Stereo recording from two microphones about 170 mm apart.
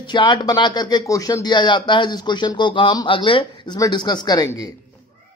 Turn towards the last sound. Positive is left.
turn(degrees=25)  # may be behind; listen again after turning